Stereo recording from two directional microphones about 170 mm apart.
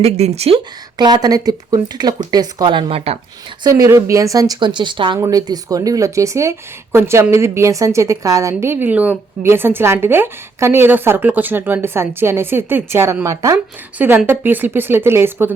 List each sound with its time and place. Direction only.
0.0 s speech: 40° right (ahead or behind)
0.9 s speech: 25° right (ahead or behind)
3.6 s speech: 20° right (ahead or behind)